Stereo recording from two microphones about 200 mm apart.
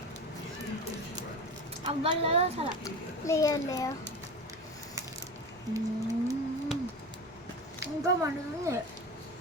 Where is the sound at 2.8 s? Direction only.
15° left (ahead or behind).